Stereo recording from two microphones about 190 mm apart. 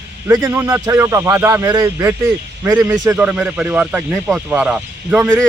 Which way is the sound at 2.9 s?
20° right (ahead or behind).